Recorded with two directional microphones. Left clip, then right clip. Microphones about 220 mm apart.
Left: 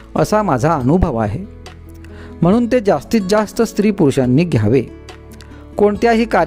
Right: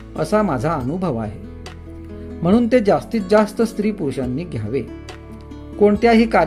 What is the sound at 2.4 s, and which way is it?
Speech, 50° left (ahead or behind).